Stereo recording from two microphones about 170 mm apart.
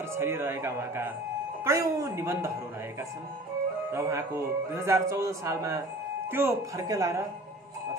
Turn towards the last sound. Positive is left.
turn(degrees=-20)  # may be behind; listen again after turning